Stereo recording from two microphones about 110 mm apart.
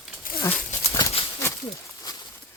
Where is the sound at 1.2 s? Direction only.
55° left (ahead or behind).